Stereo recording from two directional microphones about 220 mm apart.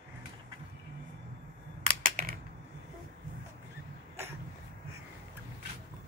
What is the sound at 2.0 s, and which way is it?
Computer keyboard, 40° right (ahead or behind).